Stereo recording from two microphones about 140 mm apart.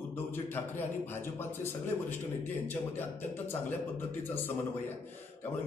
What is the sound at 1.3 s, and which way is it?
Speech, 15° left (ahead or behind).